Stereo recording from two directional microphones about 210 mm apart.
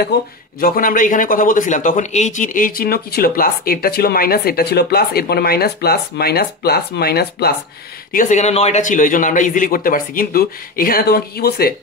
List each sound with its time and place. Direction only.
0.6 s speech: 40° left (ahead or behind)
8.1 s a man's voice: 40° left (ahead or behind)